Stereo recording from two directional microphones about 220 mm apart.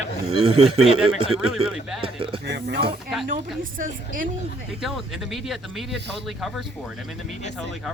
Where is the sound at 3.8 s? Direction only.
40° right (ahead or behind).